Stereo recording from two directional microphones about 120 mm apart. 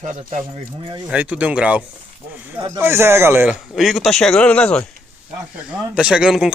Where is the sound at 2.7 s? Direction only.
20° right (ahead or behind).